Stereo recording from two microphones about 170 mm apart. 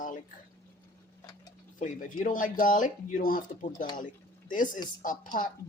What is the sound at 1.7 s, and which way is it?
Speech, 50° left (ahead or behind).